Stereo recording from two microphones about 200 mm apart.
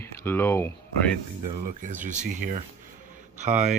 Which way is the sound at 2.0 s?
35° right (ahead or behind).